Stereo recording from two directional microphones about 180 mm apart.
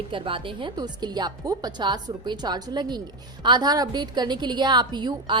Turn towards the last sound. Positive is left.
turn(degrees=-25)  # may be behind; listen again after turning